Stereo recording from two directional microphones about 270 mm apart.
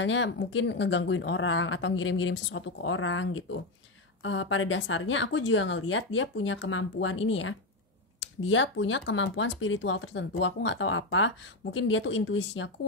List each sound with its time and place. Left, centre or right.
0.0 s speech: left